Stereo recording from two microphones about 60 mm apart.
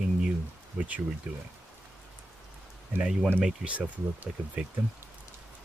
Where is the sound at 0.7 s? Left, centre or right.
Right.